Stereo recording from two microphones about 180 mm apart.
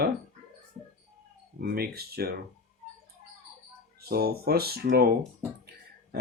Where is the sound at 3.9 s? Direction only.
60° right (ahead or behind).